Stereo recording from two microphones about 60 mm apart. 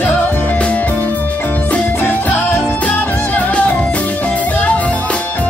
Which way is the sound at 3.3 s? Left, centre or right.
Left.